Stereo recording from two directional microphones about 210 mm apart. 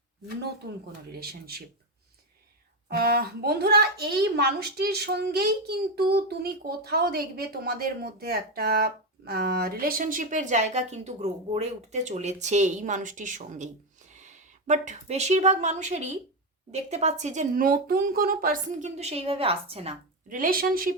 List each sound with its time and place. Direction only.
1.1 s a woman's voice: 50° right (ahead or behind)
2.9 s a woman's voice: 45° right (ahead or behind)